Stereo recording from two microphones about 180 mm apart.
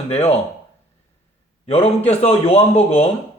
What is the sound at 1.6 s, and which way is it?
A man's voice, 35° left (ahead or behind).